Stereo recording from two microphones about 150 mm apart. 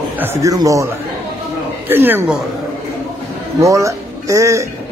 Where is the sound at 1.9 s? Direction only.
15° right (ahead or behind).